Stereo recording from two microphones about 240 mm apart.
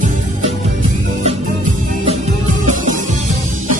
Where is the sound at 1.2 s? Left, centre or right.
Right.